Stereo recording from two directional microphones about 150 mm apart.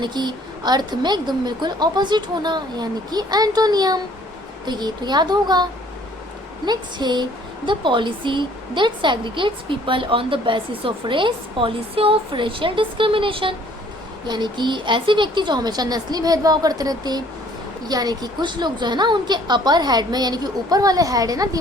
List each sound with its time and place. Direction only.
0.0 s a woman's voice: 30° right (ahead or behind)
6.7 s a woman's voice: 30° right (ahead or behind)